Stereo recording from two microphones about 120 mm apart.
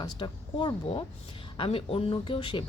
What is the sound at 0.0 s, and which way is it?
A woman's voice, 40° left (ahead or behind).